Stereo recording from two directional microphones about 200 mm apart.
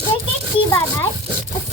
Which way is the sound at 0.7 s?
10° left (ahead or behind).